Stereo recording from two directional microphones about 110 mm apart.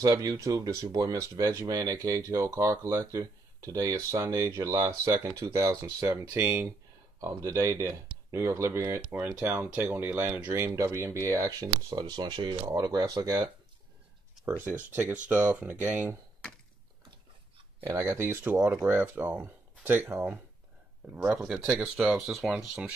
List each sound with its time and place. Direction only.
0.0 s speech: 30° right (ahead or behind)
7.2 s speech: 30° right (ahead or behind)
10.6 s speech: 25° right (ahead or behind)
11.6 s speech: 40° right (ahead or behind)
14.4 s speech: 20° right (ahead or behind)
17.8 s speech: 25° right (ahead or behind)
21.9 s speech: 5° right (ahead or behind)